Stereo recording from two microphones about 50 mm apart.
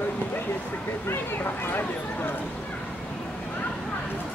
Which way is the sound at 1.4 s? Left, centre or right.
Left.